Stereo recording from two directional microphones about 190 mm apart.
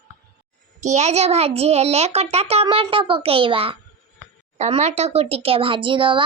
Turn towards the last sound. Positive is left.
turn(degrees=-25)  # may be behind; listen again after turning